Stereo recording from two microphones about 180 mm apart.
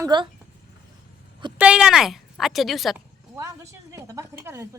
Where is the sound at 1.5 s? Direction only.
5° right (ahead or behind).